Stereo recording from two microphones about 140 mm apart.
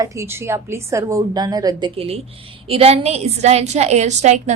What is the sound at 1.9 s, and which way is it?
A woman's voice, 45° right (ahead or behind).